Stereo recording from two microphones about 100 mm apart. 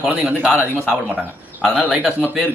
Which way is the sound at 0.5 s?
20° left (ahead or behind).